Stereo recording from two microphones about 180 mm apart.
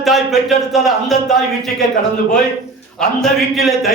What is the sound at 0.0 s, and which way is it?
Speech, centre (ahead or behind).